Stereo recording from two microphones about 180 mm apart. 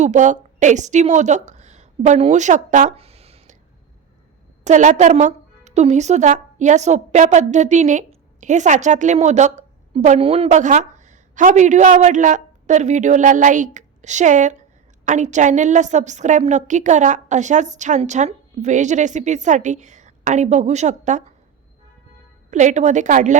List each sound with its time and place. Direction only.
0.0 s a woman's voice: 40° right (ahead or behind)
4.6 s a woman's voice: 40° right (ahead or behind)
22.4 s a woman's voice: 40° right (ahead or behind)